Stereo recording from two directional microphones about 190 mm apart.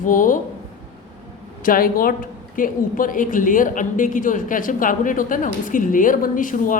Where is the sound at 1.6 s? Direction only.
50° left (ahead or behind).